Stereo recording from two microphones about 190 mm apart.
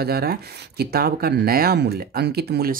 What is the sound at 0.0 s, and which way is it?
Speech, 55° right (ahead or behind).